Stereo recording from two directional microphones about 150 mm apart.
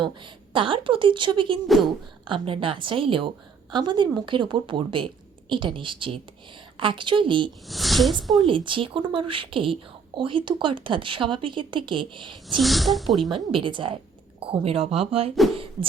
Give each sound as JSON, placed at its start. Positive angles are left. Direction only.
{"t": 0.5, "sound": "a woman's voice", "side_deg": -35}
{"t": 1.6, "sound": "speech", "side_deg": 0}
{"t": 2.2, "sound": "a woman's voice", "side_deg": -35}
{"t": 7.7, "sound": "speech", "side_deg": 0}
{"t": 8.4, "sound": "a woman's voice", "side_deg": -35}
{"t": 12.5, "sound": "speech", "side_deg": 0}
{"t": 13.3, "sound": "speech", "side_deg": -35}
{"t": 15.5, "sound": "beatboxing", "side_deg": -35}